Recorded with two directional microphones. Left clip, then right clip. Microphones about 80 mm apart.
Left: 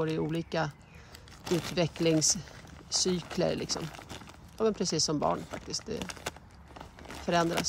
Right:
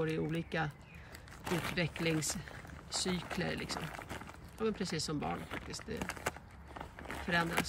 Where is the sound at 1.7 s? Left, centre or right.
Left.